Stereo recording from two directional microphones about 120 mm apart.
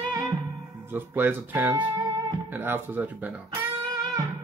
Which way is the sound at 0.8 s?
15° right (ahead or behind).